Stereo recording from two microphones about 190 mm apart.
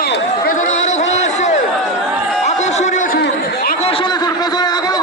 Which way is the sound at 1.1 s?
35° left (ahead or behind).